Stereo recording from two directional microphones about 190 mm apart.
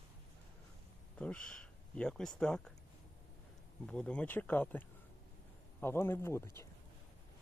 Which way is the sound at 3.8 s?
5° left (ahead or behind).